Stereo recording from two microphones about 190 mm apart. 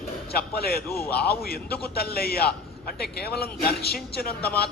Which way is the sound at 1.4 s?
55° left (ahead or behind).